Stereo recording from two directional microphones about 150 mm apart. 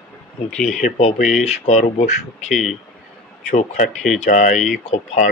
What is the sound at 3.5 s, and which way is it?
Speech, 55° left (ahead or behind).